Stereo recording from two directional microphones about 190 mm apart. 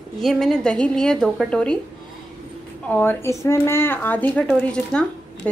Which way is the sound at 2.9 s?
10° left (ahead or behind).